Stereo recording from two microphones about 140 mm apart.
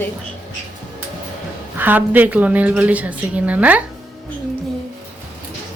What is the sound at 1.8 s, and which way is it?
A woman's voice, 15° right (ahead or behind).